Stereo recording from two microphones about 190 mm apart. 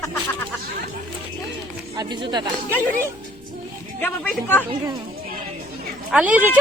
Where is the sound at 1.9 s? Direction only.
25° right (ahead or behind).